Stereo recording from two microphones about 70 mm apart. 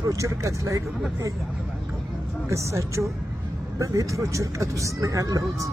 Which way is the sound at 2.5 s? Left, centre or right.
Right.